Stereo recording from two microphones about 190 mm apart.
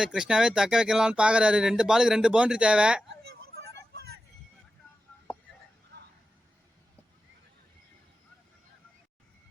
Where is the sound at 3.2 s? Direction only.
60° right (ahead or behind).